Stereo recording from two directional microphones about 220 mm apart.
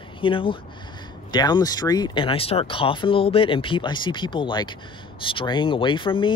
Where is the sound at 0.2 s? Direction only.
25° left (ahead or behind).